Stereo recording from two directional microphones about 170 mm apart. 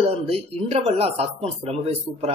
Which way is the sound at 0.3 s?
35° right (ahead or behind).